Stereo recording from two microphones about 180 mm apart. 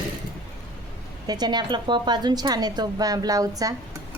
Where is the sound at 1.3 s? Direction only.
25° right (ahead or behind).